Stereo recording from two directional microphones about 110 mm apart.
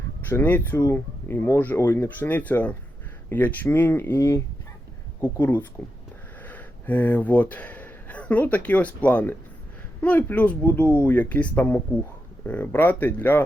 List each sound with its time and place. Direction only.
0.2 s speech: 20° left (ahead or behind)